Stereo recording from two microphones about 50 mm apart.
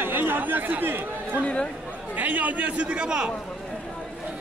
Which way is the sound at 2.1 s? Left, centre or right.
Right.